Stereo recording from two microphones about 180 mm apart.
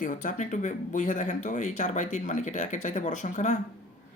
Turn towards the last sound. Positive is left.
turn(degrees=40)  # may be behind; listen again after turning